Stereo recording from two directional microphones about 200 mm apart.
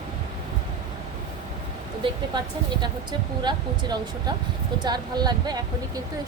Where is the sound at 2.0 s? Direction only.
25° right (ahead or behind).